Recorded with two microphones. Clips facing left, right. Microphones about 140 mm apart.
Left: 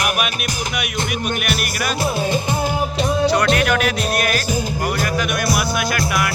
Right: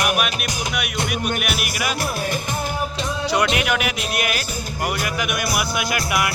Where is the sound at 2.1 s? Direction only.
30° left (ahead or behind).